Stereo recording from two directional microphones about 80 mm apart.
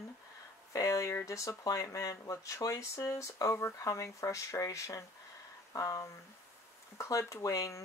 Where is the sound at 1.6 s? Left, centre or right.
Left.